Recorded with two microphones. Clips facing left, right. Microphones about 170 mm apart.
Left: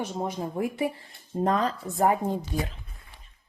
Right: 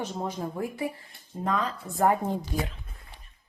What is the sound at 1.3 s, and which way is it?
Speech, 40° left (ahead or behind).